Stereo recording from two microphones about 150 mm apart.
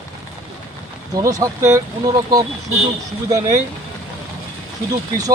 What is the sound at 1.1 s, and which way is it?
Speech, 25° right (ahead or behind).